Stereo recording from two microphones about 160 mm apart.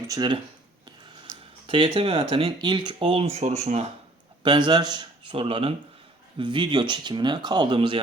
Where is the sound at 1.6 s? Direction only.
30° right (ahead or behind).